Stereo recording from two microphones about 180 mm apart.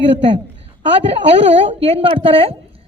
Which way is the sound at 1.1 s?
35° right (ahead or behind).